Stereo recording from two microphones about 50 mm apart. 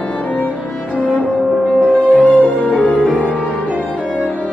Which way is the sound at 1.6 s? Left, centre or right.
Left.